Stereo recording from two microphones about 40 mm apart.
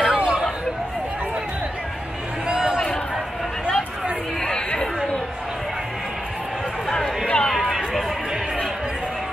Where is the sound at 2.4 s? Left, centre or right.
Centre.